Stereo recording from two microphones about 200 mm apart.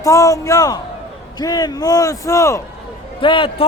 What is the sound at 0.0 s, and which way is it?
A man's voice, 15° left (ahead or behind).